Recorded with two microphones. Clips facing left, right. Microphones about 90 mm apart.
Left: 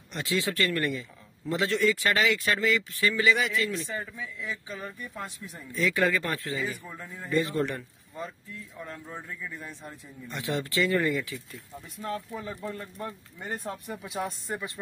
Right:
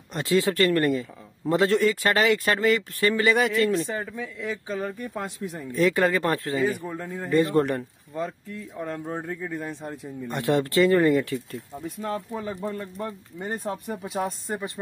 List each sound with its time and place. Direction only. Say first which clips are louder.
0.1 s a man's voice: right 7 dB; 45° right (ahead or behind)
4.8 s a man's voice: right 7 dB; 65° right (ahead or behind); by 11.3 s 45° right (ahead or behind)
11.3 s speech: right 9 dB; 30° right (ahead or behind)
13.7 s speech: right 5 dB; 20° right (ahead or behind)